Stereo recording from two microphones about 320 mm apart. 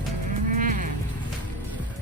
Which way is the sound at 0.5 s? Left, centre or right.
Right.